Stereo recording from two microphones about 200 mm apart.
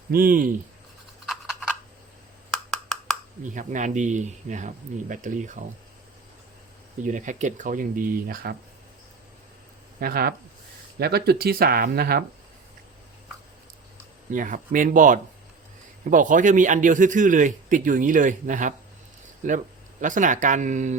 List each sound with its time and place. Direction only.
0.1 s speech: 45° right (ahead or behind)
2.6 s a sound: centre (ahead or behind)
3.4 s a man's voice: 40° right (ahead or behind)
7.0 s a man's voice: 40° right (ahead or behind)
10.0 s speech: 50° right (ahead or behind)
14.3 s a man's voice: 40° right (ahead or behind)